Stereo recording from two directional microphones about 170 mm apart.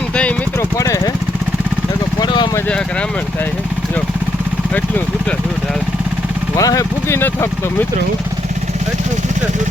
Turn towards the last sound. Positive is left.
turn(degrees=15)  # may be behind; listen again after turning